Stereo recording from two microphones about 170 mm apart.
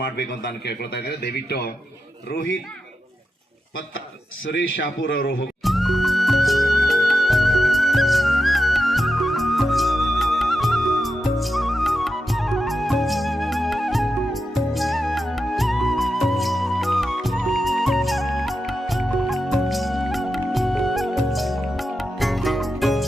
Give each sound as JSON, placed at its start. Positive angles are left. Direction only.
{"t": 0.0, "sound": "a man's voice", "side_deg": 70}
{"t": 4.4, "sound": "a man's voice", "side_deg": 90}
{"t": 5.6, "sound": "music", "side_deg": 0}